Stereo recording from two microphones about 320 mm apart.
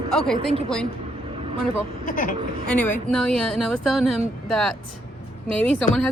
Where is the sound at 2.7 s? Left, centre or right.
Centre.